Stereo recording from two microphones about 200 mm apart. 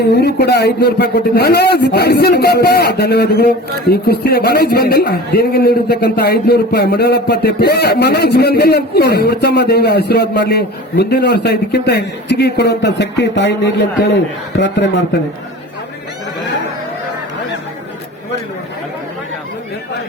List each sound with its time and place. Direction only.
0.0 s a man's voice: 55° left (ahead or behind)